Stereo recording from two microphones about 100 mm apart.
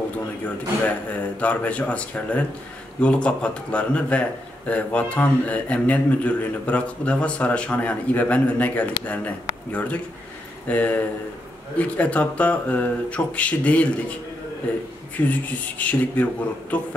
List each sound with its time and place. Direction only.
0.8 s a man's voice: 15° left (ahead or behind)